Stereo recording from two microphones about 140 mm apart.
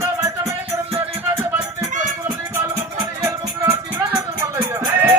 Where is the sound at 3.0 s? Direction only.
25° right (ahead or behind).